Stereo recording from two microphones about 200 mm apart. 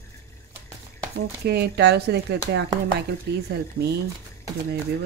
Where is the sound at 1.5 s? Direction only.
55° right (ahead or behind).